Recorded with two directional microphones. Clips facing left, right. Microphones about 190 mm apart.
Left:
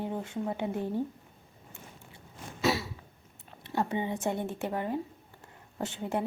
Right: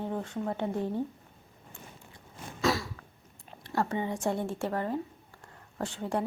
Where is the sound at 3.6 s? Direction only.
20° left (ahead or behind).